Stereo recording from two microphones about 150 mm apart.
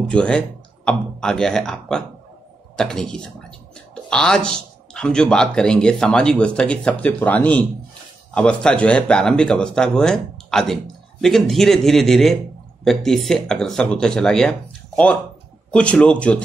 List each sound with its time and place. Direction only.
0.1 s speech: 5° left (ahead or behind)
15.7 s speech: 10° left (ahead or behind)